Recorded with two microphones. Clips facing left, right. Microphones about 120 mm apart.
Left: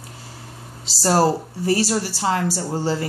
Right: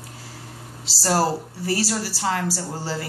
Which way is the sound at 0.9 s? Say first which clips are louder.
Left 4 dB; 25° left (ahead or behind).